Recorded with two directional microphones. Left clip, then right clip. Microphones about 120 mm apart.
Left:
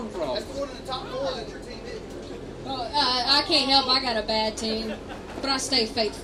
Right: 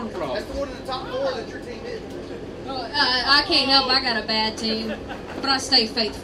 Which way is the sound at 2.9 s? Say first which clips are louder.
Right 3 dB; 60° left (ahead or behind).